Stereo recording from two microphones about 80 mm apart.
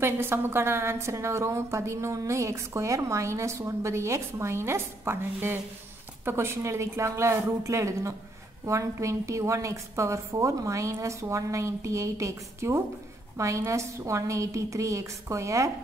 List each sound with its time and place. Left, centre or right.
0.0 s a woman's voice: right